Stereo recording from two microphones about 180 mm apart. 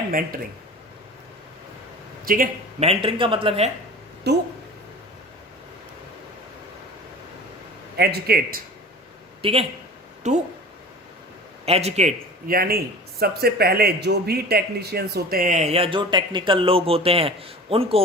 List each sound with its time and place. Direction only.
0.1 s speech: 50° right (ahead or behind)
2.2 s speech: 50° right (ahead or behind)
2.8 s speech: 30° right (ahead or behind)
4.3 s speech: 65° right (ahead or behind)
7.9 s a man's voice: 60° right (ahead or behind)
9.4 s speech: 30° right (ahead or behind)
11.6 s speech: 35° right (ahead or behind)